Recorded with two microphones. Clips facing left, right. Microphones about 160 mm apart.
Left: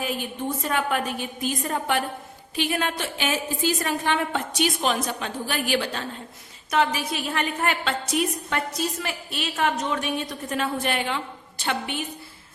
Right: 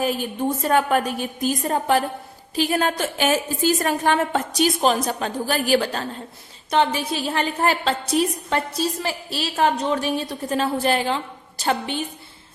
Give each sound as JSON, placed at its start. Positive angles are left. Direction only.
{"t": 0.6, "sound": "a woman's voice", "side_deg": -40}
{"t": 6.7, "sound": "a woman's voice", "side_deg": -30}